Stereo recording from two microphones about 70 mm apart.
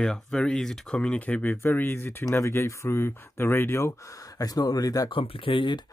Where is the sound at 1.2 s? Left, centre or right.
Left.